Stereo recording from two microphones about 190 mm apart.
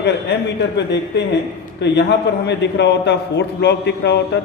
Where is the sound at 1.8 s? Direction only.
65° left (ahead or behind).